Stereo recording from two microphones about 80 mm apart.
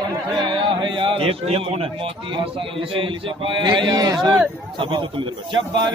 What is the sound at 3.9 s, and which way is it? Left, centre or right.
Speech, right.